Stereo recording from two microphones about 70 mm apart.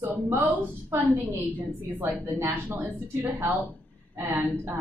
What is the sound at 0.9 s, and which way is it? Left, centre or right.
A woman's voice, right.